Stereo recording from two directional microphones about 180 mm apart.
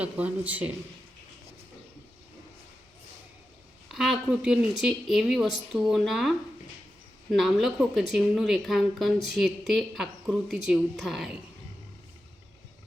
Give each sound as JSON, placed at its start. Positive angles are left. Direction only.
{"t": 0.0, "sound": "speech", "side_deg": -10}
{"t": 3.9, "sound": "a woman's voice", "side_deg": 0}
{"t": 7.3, "sound": "a woman's voice", "side_deg": 0}